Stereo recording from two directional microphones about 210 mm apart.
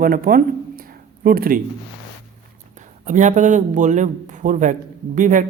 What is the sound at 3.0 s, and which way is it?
Speech, 35° right (ahead or behind).